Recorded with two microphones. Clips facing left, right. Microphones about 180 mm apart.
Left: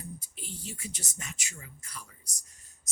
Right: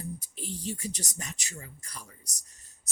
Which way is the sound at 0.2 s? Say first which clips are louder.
Right 6 dB; 35° right (ahead or behind).